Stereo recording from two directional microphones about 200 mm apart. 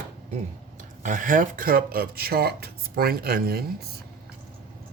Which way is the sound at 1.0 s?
40° right (ahead or behind).